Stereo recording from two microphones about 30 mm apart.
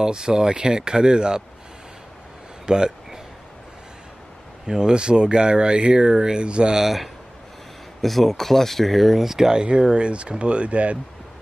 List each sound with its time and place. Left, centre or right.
0.0 s speech: right
2.6 s speech: right
4.6 s speech: right
6.0 s speech: right
6.4 s speech: right
8.0 s speech: centre
9.2 s speech: centre
9.5 s speech: right